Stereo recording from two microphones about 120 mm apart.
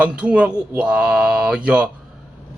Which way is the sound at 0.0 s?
10° right (ahead or behind).